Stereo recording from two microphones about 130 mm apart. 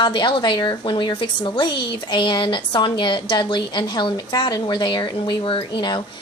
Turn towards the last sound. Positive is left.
turn(degrees=40)  # may be behind; listen again after turning